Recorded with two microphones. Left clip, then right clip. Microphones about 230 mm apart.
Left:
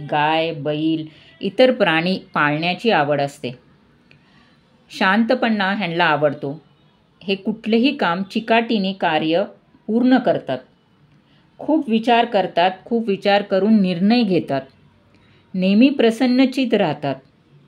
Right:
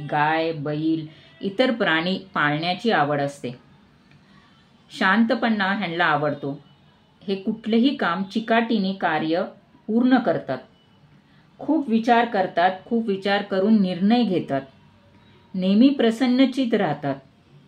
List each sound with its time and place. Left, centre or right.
0.0 s a sound: left
0.7 s speech: left
4.9 s speech: left
11.6 s speech: left